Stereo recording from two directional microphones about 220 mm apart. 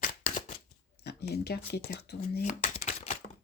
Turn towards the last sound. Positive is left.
turn(degrees=35)  # may be behind; listen again after turning